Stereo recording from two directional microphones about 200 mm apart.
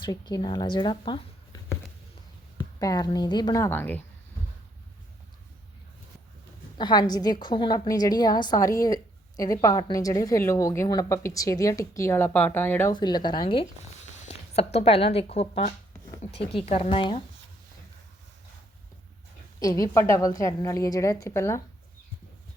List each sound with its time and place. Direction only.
0.0 s a woman's voice: 20° left (ahead or behind)
2.6 s a woman's voice: 20° left (ahead or behind)
6.7 s a woman's voice: 20° left (ahead or behind)
12.9 s a woman's voice: 20° left (ahead or behind)
19.5 s a woman's voice: 15° left (ahead or behind)